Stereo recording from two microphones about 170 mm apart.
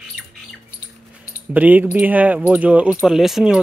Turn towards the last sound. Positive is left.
turn(degrees=0)  # may be behind; listen again after turning